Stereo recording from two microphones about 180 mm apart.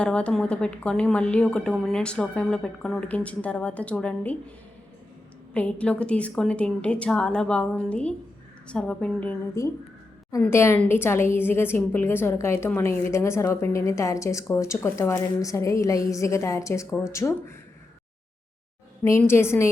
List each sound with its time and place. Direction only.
0.0 s a woman's voice: 5° left (ahead or behind)
5.5 s a woman's voice: 5° left (ahead or behind)
19.0 s a woman's voice: 15° left (ahead or behind)